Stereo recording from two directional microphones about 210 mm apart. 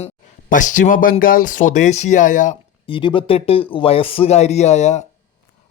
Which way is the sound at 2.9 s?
25° left (ahead or behind).